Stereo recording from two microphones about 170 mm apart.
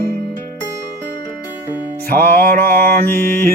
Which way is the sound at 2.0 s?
60° right (ahead or behind).